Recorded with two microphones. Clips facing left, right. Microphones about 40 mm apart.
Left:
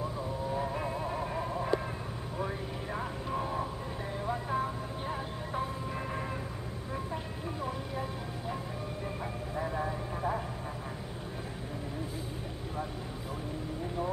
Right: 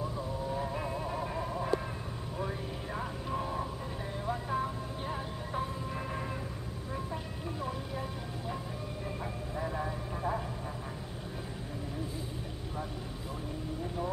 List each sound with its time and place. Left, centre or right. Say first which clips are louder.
0.5 s music: left 2 dB; centre
2.3 s a sound: left 1 dB; centre
4.3 s vehicle: left 1 dB; centre
7.6 s vehicle: left 2 dB; centre